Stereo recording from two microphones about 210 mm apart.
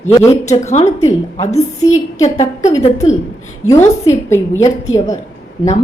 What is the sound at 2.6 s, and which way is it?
Speech, 30° left (ahead or behind).